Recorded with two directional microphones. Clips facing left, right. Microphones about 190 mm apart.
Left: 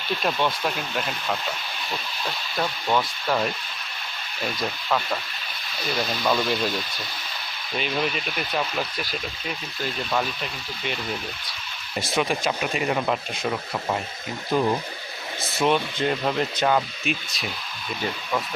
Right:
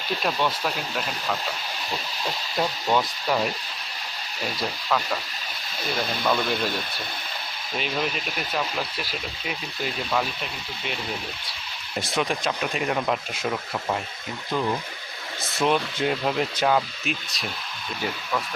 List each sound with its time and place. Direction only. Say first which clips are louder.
0.3 s speech: left 1 dB; centre (ahead or behind)
2.2 s speech: right 2 dB; 15° right (ahead or behind)
6.2 s speech: left 1 dB; centre (ahead or behind)
7.8 s speech: left 2 dB; centre (ahead or behind)
11.9 s speech: left 1 dB; 5° left (ahead or behind)
14.5 s speech: left 4 dB; 20° left (ahead or behind)
15.5 s speech: left 1 dB; centre (ahead or behind)